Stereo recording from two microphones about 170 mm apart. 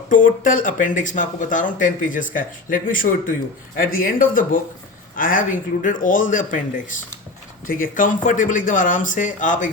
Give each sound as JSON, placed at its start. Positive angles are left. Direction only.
{"t": 0.1, "sound": "speech", "side_deg": 50}